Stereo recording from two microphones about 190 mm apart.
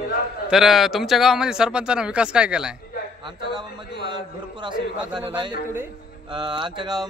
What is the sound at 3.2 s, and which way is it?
Speech, 25° right (ahead or behind).